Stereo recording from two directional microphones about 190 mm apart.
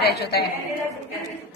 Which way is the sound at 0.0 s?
55° left (ahead or behind).